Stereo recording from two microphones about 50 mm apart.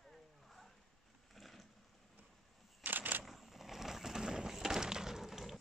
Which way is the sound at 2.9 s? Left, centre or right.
Right.